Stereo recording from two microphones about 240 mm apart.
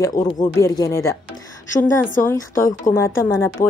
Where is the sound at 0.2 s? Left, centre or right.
Centre.